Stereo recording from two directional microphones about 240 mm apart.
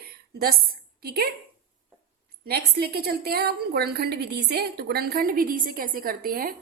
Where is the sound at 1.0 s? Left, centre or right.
Right.